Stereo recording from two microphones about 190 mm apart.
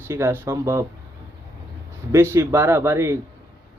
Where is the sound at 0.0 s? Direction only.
15° right (ahead or behind).